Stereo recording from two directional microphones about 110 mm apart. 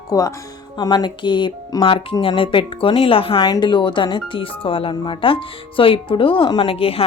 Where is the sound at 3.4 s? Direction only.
40° left (ahead or behind).